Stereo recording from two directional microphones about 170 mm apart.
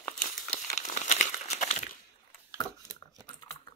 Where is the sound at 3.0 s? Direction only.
20° left (ahead or behind).